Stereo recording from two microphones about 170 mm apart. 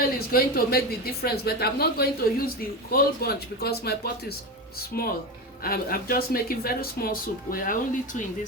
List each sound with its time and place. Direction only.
0.3 s speech: 60° left (ahead or behind)